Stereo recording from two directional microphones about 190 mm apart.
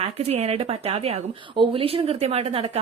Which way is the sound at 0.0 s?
35° right (ahead or behind).